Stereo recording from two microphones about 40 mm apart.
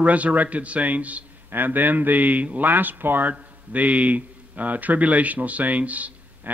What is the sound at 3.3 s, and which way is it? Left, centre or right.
A man's voice, right.